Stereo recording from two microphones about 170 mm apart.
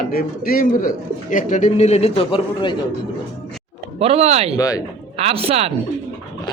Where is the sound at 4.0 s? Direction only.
35° right (ahead or behind).